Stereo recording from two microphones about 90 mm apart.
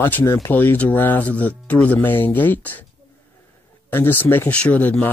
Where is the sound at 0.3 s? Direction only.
25° left (ahead or behind).